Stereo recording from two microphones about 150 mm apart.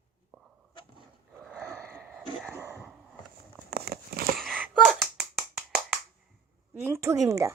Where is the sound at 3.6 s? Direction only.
90° right.